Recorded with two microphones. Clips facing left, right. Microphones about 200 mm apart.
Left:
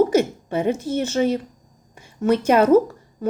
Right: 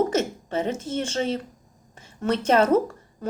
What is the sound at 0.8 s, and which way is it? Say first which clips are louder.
Speech: left 5 dB; 10° left (ahead or behind).